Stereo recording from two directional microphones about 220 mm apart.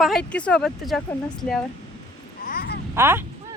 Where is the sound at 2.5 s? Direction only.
45° left (ahead or behind).